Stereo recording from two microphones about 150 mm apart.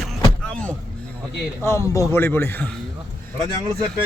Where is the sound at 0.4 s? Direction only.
5° left (ahead or behind).